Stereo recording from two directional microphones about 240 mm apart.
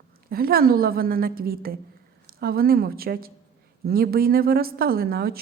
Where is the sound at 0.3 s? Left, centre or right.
Right.